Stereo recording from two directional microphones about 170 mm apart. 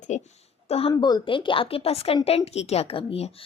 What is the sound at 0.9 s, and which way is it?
Speech, 25° left (ahead or behind).